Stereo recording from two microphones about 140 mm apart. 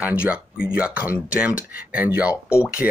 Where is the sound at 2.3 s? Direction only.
20° left (ahead or behind).